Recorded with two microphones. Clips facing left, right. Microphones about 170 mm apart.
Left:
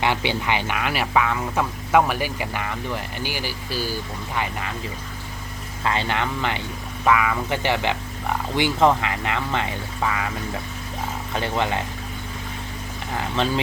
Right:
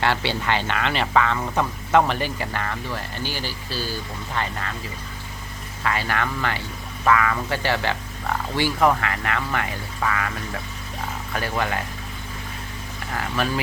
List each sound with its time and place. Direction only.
0.0 s speech: 15° left (ahead or behind)
5.8 s speech: 25° left (ahead or behind)
11.3 s speech: 20° left (ahead or behind)
13.1 s speech: 20° left (ahead or behind)